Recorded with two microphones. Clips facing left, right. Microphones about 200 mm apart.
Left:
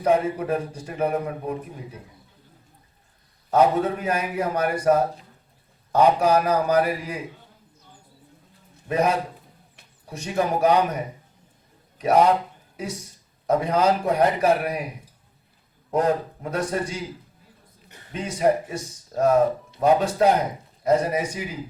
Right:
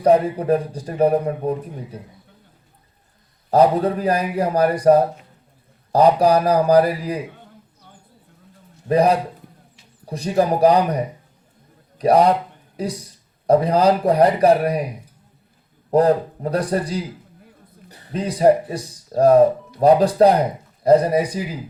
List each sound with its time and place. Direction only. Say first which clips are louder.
0.0 s a man's voice: right 5 dB; 35° right (ahead or behind)
3.5 s a man's voice: right 4 dB; 35° right (ahead or behind)
8.9 s a man's voice: right 6 dB; 35° right (ahead or behind)
15.9 s a man's voice: right 6 dB; 35° right (ahead or behind)